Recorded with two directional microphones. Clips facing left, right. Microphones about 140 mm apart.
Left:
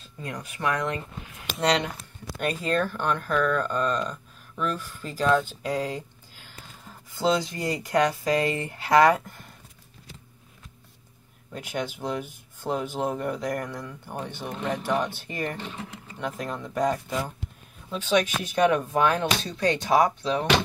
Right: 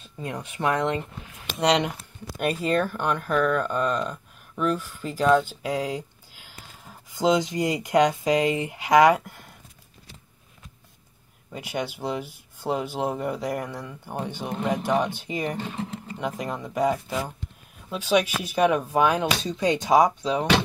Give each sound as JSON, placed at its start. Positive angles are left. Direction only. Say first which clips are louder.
{"t": 0.2, "sound": "speech", "louder": "right 3 dB", "side_deg": -25}
{"t": 1.6, "sound": "speech", "louder": "right 2 dB", "side_deg": -15}
{"t": 11.5, "sound": "speech", "louder": "right 1 dB", "side_deg": -10}
{"t": 19.5, "sound": "speech", "louder": "right 3 dB", "side_deg": -20}